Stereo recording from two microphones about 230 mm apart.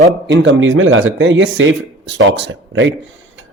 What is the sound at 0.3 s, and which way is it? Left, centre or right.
A man's voice, right.